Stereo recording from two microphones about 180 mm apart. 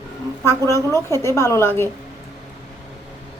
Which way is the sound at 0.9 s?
15° left (ahead or behind).